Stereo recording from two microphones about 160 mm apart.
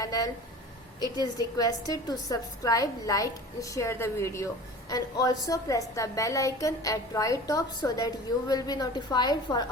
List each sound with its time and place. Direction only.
0.0 s a woman's voice: 25° left (ahead or behind)